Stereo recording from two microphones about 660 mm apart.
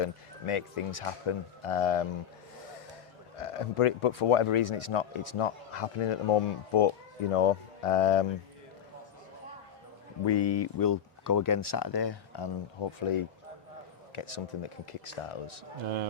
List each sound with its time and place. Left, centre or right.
0.0 s speech: left
3.3 s speech: left
10.4 s speech: left
10.8 s speech: left
13.1 s speech: left
15.8 s speech: right